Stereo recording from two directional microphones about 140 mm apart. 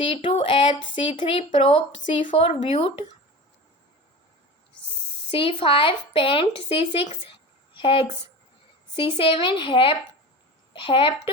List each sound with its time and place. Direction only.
0.0 s a woman's voice: 40° left (ahead or behind)
5.3 s a woman's voice: 40° left (ahead or behind)
9.1 s a woman's voice: 40° left (ahead or behind)